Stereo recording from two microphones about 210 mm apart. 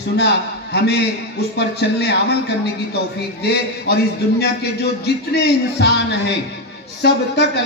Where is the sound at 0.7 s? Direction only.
50° left (ahead or behind).